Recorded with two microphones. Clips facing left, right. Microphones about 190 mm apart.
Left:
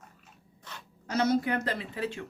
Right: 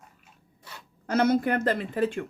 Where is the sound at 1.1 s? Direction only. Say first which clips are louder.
Right 4 dB; 55° right (ahead or behind).